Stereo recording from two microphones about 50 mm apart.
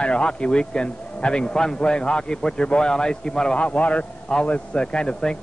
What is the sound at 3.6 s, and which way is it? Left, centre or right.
A man's voice, left.